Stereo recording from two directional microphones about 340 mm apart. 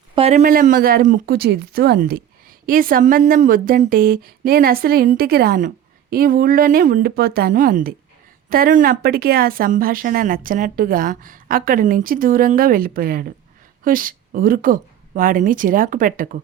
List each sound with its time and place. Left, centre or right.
0.2 s a woman's voice: centre